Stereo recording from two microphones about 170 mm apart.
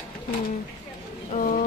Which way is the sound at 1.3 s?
55° left (ahead or behind).